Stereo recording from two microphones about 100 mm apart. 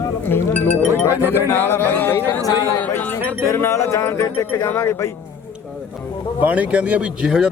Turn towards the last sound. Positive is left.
turn(degrees=-10)  # may be behind; listen again after turning